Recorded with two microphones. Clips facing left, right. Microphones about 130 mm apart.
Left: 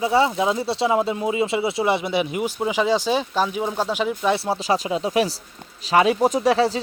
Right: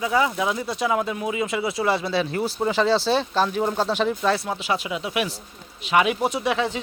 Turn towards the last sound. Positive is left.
turn(degrees=35)  # may be behind; listen again after turning